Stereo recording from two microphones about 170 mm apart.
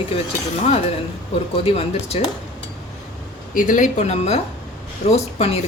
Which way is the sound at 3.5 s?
50° left (ahead or behind).